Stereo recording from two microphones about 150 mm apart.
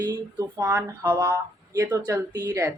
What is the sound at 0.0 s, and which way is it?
Speech, 25° right (ahead or behind).